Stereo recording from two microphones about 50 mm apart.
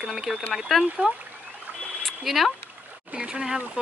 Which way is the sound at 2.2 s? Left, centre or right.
Centre.